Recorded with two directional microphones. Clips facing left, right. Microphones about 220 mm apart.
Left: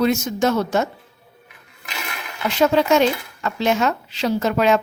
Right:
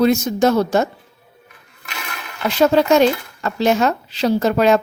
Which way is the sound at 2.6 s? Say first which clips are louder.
Right 3 dB; 35° right (ahead or behind).